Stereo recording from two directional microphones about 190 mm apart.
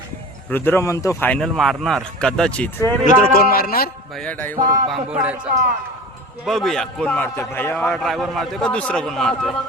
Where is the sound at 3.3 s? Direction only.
50° left (ahead or behind).